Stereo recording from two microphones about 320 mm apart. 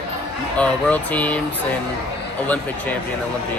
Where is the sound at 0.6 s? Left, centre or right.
Centre.